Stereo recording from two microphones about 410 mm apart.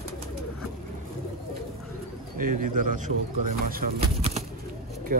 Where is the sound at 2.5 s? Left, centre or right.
Right.